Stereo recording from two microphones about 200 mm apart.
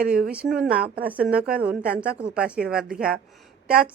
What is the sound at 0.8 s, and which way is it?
Speech, 45° right (ahead or behind).